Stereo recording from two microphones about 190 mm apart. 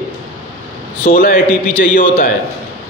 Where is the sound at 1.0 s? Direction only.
50° left (ahead or behind).